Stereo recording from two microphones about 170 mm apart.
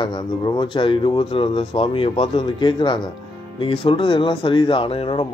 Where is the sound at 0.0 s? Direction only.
25° left (ahead or behind).